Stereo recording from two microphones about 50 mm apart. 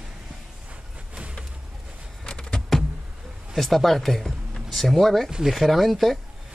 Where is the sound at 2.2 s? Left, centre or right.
Centre.